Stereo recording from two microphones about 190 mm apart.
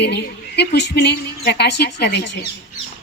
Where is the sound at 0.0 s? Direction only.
60° left (ahead or behind).